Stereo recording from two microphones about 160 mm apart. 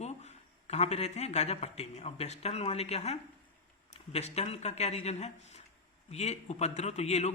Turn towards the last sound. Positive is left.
turn(degrees=45)  # may be behind; listen again after turning